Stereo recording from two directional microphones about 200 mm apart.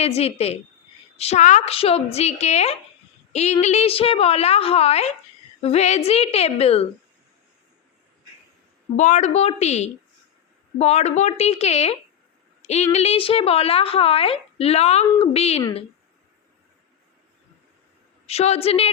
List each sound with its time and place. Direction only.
0.0 s a woman's voice: 30° left (ahead or behind)
9.0 s a woman's voice: 35° left (ahead or behind)
18.3 s a woman's voice: 30° left (ahead or behind)